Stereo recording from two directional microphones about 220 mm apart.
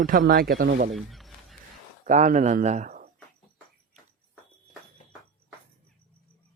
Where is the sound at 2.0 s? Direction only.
35° right (ahead or behind).